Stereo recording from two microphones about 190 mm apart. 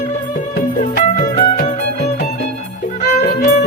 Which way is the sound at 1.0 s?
35° left (ahead or behind).